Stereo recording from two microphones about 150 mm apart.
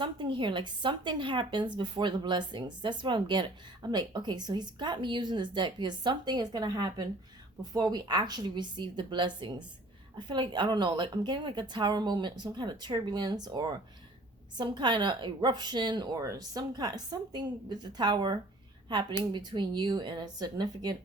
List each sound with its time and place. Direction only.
0.0 s a woman's voice: 35° right (ahead or behind)